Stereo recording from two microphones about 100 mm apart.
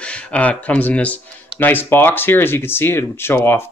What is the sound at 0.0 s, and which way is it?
Speech, 10° left (ahead or behind).